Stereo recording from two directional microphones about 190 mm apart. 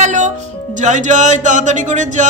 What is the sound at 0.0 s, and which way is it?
Music, 40° right (ahead or behind).